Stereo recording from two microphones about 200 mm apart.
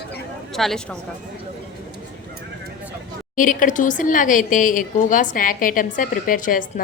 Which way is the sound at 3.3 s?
40° left (ahead or behind).